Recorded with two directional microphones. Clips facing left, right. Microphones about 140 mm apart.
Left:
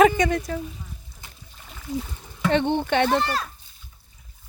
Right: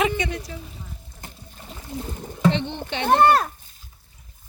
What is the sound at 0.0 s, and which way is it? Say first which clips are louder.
Speech: left 7 dB; 45° left (ahead or behind).